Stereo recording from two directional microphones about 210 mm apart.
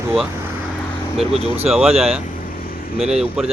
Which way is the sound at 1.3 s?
30° right (ahead or behind).